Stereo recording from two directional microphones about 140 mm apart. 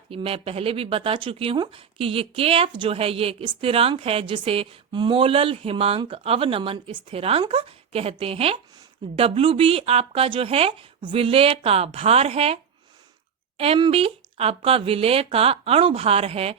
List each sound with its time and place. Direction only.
0.1 s a woman's voice: 40° right (ahead or behind)
13.6 s a woman's voice: 40° right (ahead or behind)